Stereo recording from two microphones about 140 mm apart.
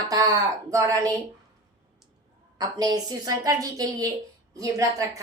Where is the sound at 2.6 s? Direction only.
25° right (ahead or behind).